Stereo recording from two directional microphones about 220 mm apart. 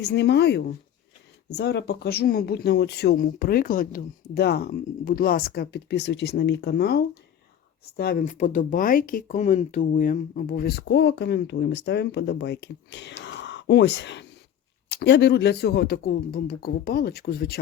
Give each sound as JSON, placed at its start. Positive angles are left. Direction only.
{"t": 0.0, "sound": "speech", "side_deg": 50}
{"t": 13.2, "sound": "a sound", "side_deg": 50}
{"t": 14.8, "sound": "speech", "side_deg": 50}